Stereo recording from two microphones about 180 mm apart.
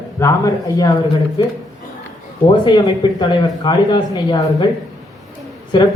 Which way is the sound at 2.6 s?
25° left (ahead or behind).